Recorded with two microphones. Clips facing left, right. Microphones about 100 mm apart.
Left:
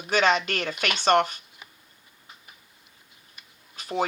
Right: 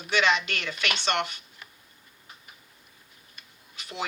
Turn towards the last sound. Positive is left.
turn(degrees=40)  # may be behind; listen again after turning